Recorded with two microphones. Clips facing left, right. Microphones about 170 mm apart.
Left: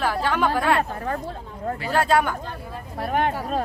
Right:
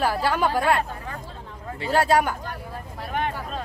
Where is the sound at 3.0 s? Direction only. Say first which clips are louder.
Left 5 dB; 45° left (ahead or behind).